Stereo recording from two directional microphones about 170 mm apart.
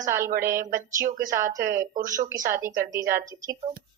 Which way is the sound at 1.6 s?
55° right (ahead or behind).